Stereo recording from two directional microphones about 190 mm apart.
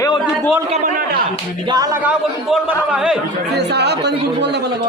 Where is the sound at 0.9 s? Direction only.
50° right (ahead or behind).